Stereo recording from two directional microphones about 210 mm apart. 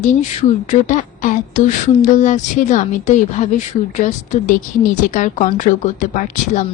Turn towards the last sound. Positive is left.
turn(degrees=35)  # may be behind; listen again after turning